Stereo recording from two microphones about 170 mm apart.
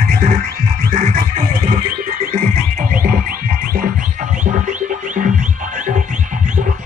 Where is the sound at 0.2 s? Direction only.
55° right (ahead or behind).